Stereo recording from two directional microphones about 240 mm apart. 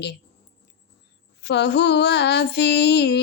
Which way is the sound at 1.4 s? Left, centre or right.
Left.